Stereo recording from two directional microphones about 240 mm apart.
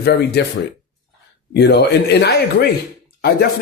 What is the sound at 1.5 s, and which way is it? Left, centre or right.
A man's voice, left.